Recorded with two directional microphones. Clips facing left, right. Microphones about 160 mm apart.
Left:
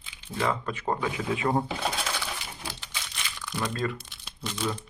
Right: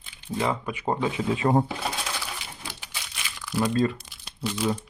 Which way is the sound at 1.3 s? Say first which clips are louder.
Right 4 dB; 30° right (ahead or behind).